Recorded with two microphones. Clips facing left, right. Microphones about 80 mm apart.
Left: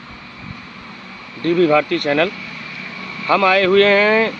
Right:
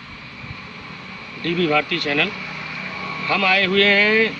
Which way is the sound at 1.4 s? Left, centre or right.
Left.